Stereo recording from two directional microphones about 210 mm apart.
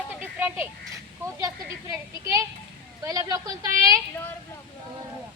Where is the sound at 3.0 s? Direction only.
20° right (ahead or behind).